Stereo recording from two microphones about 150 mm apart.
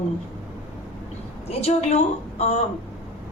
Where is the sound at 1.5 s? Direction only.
45° left (ahead or behind).